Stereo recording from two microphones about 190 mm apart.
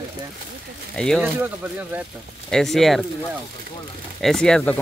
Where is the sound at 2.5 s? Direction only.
Centre (ahead or behind).